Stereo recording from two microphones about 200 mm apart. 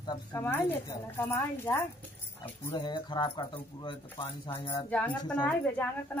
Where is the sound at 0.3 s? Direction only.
10° left (ahead or behind).